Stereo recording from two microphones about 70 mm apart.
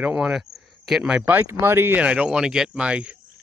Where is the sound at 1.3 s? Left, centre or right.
Right.